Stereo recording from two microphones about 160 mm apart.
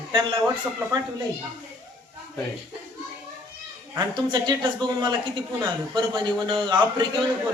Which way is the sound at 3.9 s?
30° right (ahead or behind).